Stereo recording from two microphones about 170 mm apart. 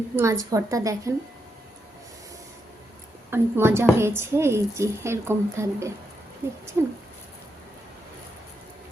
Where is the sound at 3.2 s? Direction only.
15° right (ahead or behind).